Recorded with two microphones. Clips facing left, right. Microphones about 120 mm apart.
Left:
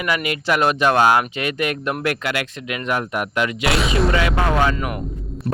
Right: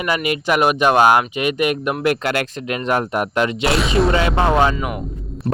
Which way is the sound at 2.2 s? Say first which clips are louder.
Right 4 dB; 40° right (ahead or behind).